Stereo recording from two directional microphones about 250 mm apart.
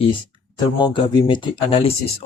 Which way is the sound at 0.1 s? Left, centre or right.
Centre.